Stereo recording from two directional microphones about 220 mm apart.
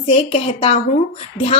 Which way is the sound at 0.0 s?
25° left (ahead or behind).